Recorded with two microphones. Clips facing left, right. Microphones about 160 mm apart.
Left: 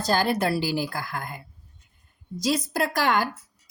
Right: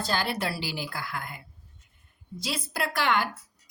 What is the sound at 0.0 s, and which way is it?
A woman's voice, 45° left (ahead or behind).